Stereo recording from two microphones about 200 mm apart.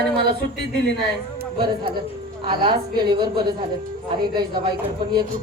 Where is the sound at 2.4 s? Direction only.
25° right (ahead or behind).